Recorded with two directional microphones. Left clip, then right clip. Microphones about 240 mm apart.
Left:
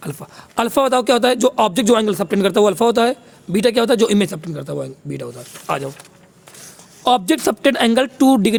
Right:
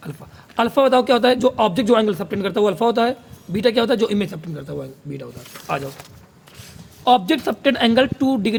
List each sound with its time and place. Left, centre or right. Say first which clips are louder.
0.0 s speech: left 6 dB; left
7.0 s speech: left 1 dB; left